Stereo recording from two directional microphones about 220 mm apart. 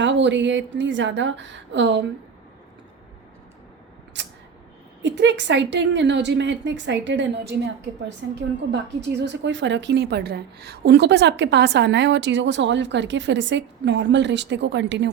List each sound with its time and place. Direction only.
0.0 s a woman's voice: 55° right (ahead or behind)
4.1 s a sound: 55° right (ahead or behind)
5.0 s a woman's voice: 55° right (ahead or behind)